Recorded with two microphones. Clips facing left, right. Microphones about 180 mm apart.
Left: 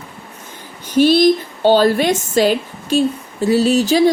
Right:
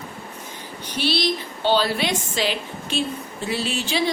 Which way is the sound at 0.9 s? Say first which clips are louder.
Left 12 dB; 45° left (ahead or behind).